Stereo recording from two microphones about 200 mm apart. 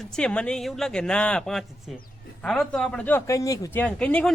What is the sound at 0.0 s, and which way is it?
A man's voice, 5° left (ahead or behind).